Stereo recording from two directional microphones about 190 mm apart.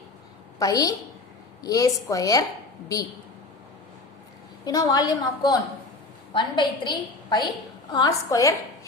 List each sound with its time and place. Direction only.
0.6 s a woman's voice: 20° left (ahead or behind)
4.6 s a woman's voice: 20° left (ahead or behind)